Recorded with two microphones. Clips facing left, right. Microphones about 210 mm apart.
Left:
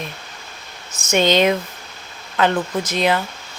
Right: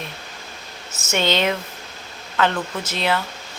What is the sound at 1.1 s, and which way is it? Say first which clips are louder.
Speech: left 5 dB; 15° left (ahead or behind).